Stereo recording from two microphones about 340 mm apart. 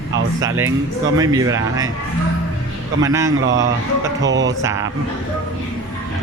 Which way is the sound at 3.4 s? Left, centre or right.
Right.